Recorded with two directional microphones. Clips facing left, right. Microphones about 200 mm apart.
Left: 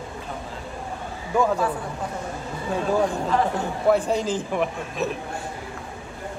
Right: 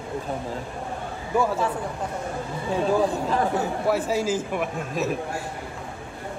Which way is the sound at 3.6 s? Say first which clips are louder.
Left 3 dB; 5° right (ahead or behind).